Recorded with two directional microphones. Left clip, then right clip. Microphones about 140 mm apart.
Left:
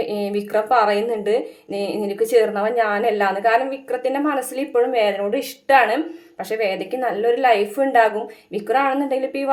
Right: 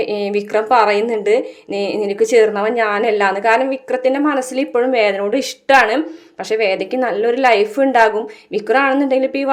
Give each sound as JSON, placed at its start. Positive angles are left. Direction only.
{"t": 0.0, "sound": "speech", "side_deg": -30}